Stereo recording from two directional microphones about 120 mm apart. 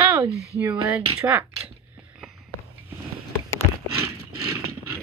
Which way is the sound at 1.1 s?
20° right (ahead or behind).